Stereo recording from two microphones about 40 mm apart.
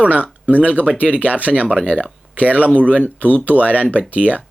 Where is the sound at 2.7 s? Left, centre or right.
Right.